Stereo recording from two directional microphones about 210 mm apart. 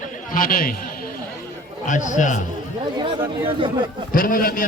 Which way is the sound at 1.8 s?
35° left (ahead or behind).